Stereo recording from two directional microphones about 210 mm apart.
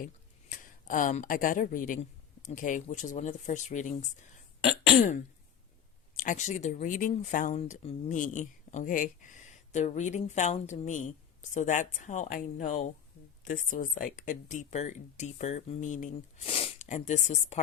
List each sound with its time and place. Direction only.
0.0 s speech: 40° left (ahead or behind)
6.1 s speech: 35° left (ahead or behind)